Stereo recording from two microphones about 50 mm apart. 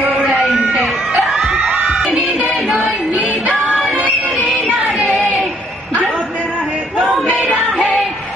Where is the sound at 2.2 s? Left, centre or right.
Right.